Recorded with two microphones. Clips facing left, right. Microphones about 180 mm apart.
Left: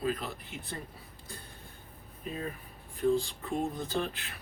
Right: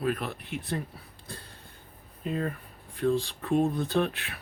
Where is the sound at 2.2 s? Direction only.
60° right (ahead or behind).